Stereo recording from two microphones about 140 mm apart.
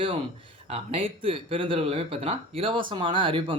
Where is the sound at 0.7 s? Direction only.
40° right (ahead or behind).